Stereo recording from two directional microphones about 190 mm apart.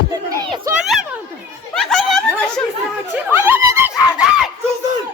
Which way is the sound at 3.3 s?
10° right (ahead or behind).